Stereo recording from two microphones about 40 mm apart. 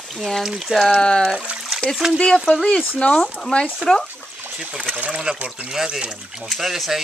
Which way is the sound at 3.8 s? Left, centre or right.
Right.